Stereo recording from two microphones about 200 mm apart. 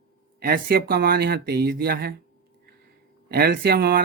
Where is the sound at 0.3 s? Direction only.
50° right (ahead or behind).